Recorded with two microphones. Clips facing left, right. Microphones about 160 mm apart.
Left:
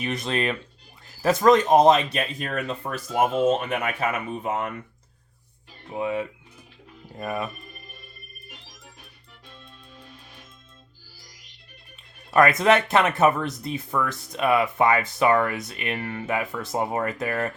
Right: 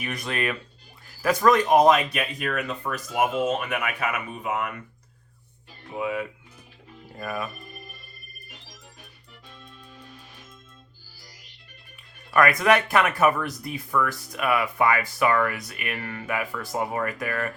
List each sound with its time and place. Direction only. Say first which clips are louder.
0.0 s speech: left 3 dB; 25° left (ahead or behind)
5.9 s speech: left 2 dB; 30° left (ahead or behind)
12.3 s speech: left 2 dB; 25° left (ahead or behind)